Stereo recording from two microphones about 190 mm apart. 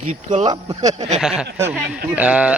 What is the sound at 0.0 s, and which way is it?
Speech, 35° right (ahead or behind).